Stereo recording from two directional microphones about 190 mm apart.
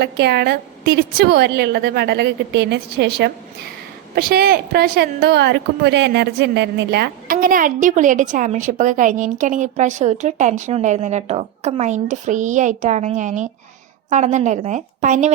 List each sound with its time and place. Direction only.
0.0 s a woman's voice: 60° right (ahead or behind); by 15.3 s 40° right (ahead or behind)